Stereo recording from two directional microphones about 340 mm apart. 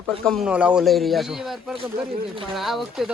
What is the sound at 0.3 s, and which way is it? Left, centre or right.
A man's voice, centre.